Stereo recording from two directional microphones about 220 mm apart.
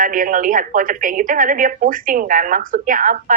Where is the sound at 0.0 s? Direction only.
35° right (ahead or behind).